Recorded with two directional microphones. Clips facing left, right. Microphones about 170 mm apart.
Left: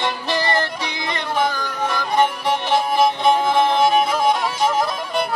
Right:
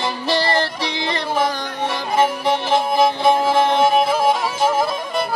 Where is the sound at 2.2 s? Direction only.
Centre (ahead or behind).